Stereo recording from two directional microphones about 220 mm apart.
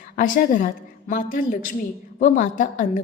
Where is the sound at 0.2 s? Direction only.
35° left (ahead or behind).